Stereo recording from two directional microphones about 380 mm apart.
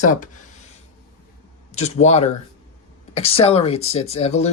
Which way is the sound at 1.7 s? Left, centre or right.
Centre.